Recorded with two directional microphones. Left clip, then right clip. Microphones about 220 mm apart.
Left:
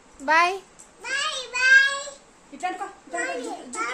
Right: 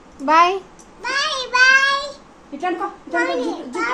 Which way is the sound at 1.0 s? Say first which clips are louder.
Right 6 dB; 15° left (ahead or behind).